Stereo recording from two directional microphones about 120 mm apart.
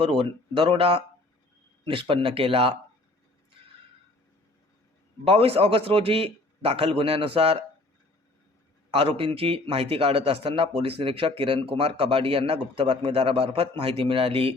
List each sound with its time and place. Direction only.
0.0 s a man's voice: 45° right (ahead or behind)
5.2 s a man's voice: 55° right (ahead or behind)
8.9 s a man's voice: 50° right (ahead or behind)